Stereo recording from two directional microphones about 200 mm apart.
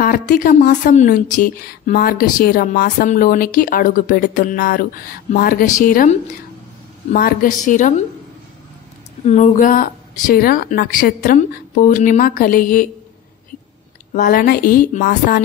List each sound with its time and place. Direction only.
0.0 s a woman's voice: 45° left (ahead or behind)
9.2 s a woman's voice: 35° left (ahead or behind)
14.1 s a woman's voice: 45° left (ahead or behind)